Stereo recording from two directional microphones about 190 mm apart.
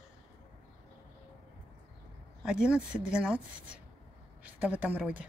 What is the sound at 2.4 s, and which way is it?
A woman's voice, 5° right (ahead or behind).